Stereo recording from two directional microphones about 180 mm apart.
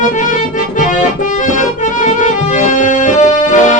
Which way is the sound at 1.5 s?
45° left (ahead or behind).